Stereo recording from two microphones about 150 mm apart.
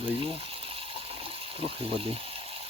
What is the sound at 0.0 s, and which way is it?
Water, 40° right (ahead or behind).